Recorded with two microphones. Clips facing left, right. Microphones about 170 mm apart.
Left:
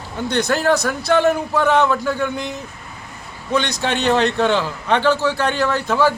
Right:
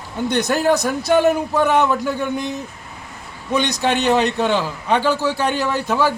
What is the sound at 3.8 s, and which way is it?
A man's voice, 10° right (ahead or behind).